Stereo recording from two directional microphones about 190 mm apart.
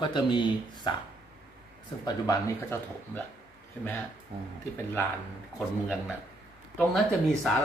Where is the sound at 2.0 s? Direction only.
15° left (ahead or behind).